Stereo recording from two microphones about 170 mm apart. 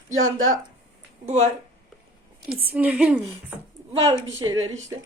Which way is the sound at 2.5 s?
10° right (ahead or behind).